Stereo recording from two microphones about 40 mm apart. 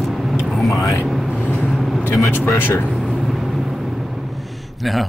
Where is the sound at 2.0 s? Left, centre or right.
Left.